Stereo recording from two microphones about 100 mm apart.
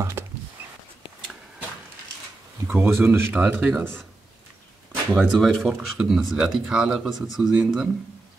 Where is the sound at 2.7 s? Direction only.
20° right (ahead or behind).